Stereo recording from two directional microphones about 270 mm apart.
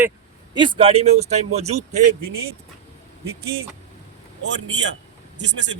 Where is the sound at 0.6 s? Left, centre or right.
Centre.